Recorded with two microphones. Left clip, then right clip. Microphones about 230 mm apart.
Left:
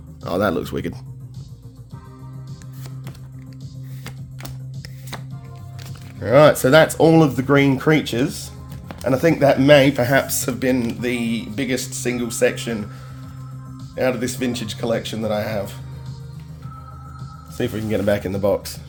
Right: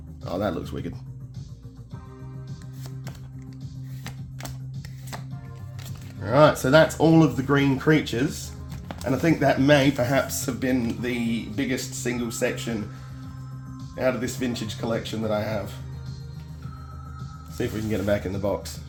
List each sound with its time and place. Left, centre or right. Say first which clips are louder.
0.3 s speech: left 7 dB; left
6.1 s speech: left 6 dB; left
13.9 s speech: left 4 dB; left
17.6 s speech: left 5 dB; left